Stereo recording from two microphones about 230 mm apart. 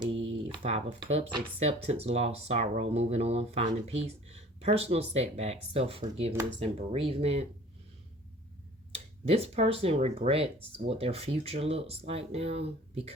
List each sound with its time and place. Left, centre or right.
0.5 s speech: right
9.2 s speech: right